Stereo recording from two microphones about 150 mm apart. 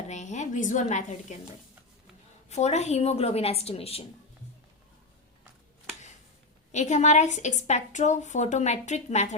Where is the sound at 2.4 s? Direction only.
50° left (ahead or behind).